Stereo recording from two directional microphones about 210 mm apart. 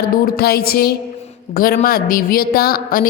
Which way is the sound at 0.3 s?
45° left (ahead or behind).